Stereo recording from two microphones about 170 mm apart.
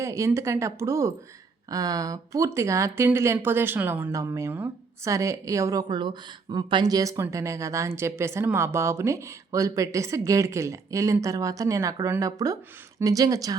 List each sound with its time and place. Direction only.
0.0 s speech: 20° right (ahead or behind)